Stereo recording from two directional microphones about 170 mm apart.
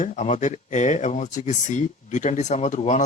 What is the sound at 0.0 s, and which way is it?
Speech, 45° left (ahead or behind).